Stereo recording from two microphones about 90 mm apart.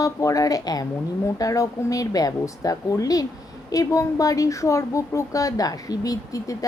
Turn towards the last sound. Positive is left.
turn(degrees=40)  # may be behind; listen again after turning